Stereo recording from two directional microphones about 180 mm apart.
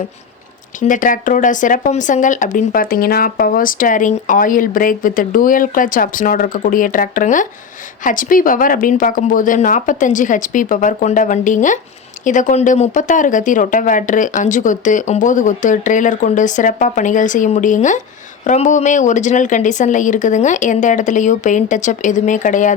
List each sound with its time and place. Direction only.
0.8 s speech: 45° left (ahead or behind)